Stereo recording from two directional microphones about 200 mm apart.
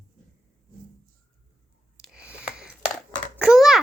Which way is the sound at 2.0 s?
5° right (ahead or behind).